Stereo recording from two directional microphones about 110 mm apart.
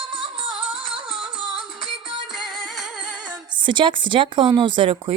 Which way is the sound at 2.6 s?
Centre (ahead or behind).